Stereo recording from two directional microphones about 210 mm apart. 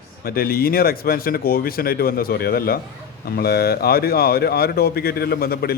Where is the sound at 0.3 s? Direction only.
45° left (ahead or behind).